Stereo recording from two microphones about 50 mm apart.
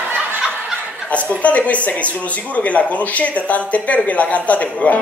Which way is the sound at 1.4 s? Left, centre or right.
Left.